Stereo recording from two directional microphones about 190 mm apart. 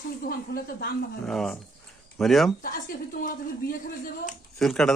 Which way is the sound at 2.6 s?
45° left (ahead or behind).